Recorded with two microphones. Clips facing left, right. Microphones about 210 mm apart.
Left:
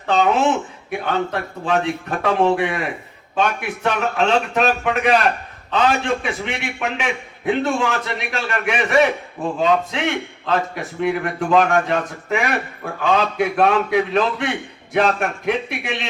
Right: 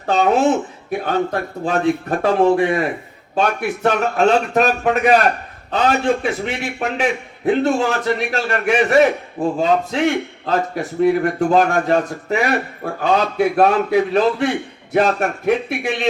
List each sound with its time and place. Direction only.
0.0 s a man's voice: 40° right (ahead or behind)
3.8 s a man's voice: 40° right (ahead or behind)
6.2 s a man's voice: 40° right (ahead or behind)